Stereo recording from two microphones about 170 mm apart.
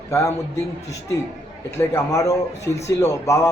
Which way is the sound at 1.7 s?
15° left (ahead or behind).